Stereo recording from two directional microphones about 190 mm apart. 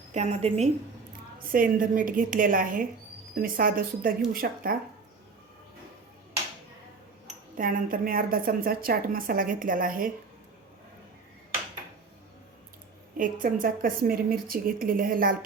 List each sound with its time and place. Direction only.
0.1 s a woman's voice: 35° right (ahead or behind)
1.5 s a woman's voice: 45° right (ahead or behind)
7.3 s a woman's voice: 45° right (ahead or behind)
13.1 s a woman's voice: 45° right (ahead or behind)